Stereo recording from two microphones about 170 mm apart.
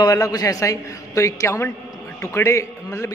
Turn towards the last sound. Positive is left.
turn(degrees=15)  # may be behind; listen again after turning